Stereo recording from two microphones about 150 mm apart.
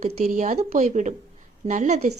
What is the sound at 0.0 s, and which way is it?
Speech, 55° right (ahead or behind).